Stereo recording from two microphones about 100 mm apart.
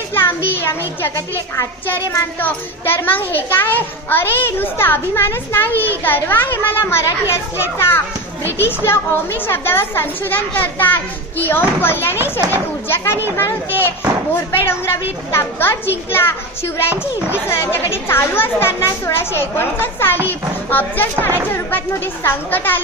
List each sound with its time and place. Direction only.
0.5 s a child's voice: 20° left (ahead or behind)